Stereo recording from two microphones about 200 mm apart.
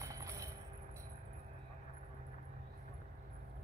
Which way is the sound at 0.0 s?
15° right (ahead or behind).